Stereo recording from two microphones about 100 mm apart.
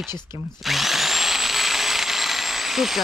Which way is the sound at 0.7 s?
Centre (ahead or behind).